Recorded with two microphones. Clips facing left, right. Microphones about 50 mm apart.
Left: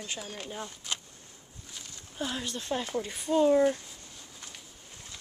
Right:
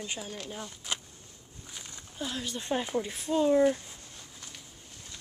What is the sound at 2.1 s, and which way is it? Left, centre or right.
Speech, centre.